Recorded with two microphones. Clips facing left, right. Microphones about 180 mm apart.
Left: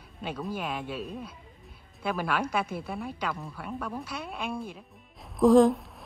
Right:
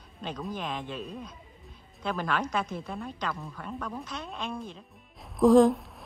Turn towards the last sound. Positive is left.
turn(degrees=0)  # may be behind; listen again after turning